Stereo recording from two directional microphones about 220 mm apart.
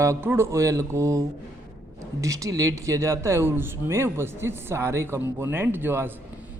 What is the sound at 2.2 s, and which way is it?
Speech, 15° right (ahead or behind).